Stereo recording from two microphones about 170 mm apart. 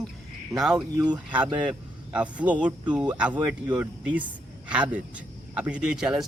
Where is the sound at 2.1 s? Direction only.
10° right (ahead or behind).